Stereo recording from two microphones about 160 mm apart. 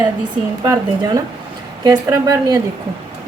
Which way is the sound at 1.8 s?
25° right (ahead or behind).